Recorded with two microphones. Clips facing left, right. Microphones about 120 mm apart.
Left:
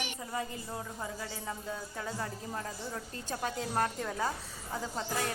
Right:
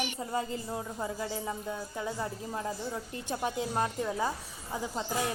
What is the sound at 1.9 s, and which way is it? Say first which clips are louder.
A woman's voice: right 3 dB; 15° right (ahead or behind).